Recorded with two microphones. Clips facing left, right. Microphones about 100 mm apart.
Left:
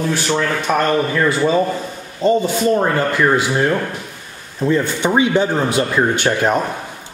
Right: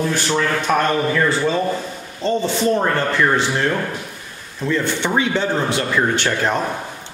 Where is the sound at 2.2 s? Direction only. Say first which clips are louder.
Left 3 dB; 10° left (ahead or behind).